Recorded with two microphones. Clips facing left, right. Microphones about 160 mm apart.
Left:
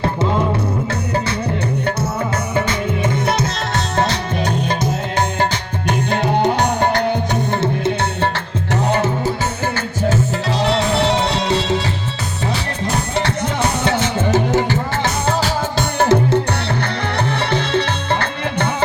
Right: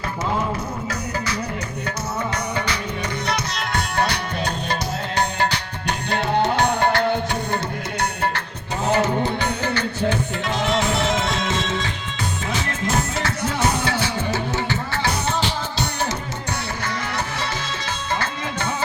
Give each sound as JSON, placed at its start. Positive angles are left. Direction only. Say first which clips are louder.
{"t": 2.6, "sound": "music", "louder": "left 7 dB", "side_deg": 25}
{"t": 6.7, "sound": "music", "louder": "left 2 dB", "side_deg": 20}
{"t": 9.6, "sound": "music", "louder": "left 4 dB", "side_deg": 50}
{"t": 10.6, "sound": "music", "louder": "left 4 dB", "side_deg": 35}
{"t": 13.8, "sound": "music", "louder": "left 5 dB", "side_deg": 25}
{"t": 15.3, "sound": "music", "louder": "left 5 dB", "side_deg": 40}
{"t": 16.0, "sound": "music", "louder": "left 12 dB", "side_deg": 55}
{"t": 17.4, "sound": "music", "louder": "left 10 dB", "side_deg": 60}